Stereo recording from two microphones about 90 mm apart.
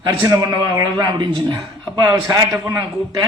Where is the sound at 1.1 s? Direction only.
50° right (ahead or behind).